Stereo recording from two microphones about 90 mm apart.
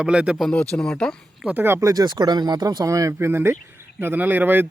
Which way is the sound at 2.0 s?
50° right (ahead or behind).